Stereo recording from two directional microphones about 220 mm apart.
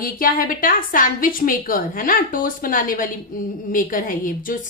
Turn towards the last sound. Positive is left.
turn(degrees=40)  # may be behind; listen again after turning